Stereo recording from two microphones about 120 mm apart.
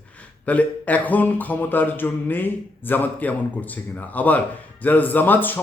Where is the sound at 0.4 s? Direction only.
10° left (ahead or behind).